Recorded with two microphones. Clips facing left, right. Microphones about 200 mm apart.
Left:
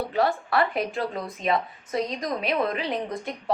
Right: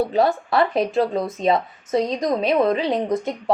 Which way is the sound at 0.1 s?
25° right (ahead or behind).